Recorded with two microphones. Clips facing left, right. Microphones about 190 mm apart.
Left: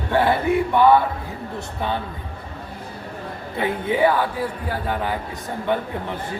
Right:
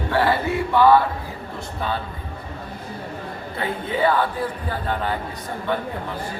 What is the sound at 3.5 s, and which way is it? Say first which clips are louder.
A man's voice: left 4 dB; 15° left (ahead or behind).